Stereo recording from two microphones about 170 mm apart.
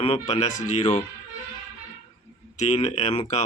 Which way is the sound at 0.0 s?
35° left (ahead or behind).